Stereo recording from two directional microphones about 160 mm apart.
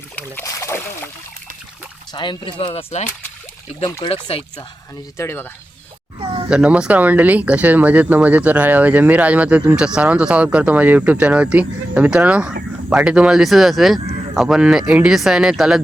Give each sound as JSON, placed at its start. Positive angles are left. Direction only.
{"t": 0.2, "sound": "speech", "side_deg": 15}
{"t": 2.1, "sound": "speech", "side_deg": 30}
{"t": 5.1, "sound": "speech", "side_deg": 15}
{"t": 6.5, "sound": "speech", "side_deg": -5}